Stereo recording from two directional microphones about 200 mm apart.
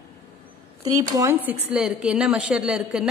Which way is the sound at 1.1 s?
15° right (ahead or behind).